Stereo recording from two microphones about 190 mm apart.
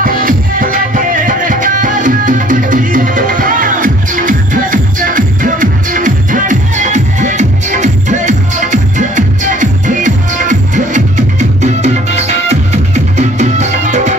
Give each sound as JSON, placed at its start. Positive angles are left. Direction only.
{"t": 0.0, "sound": "music", "side_deg": -45}